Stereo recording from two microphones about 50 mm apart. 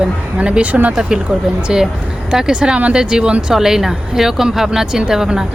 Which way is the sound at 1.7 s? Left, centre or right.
Centre.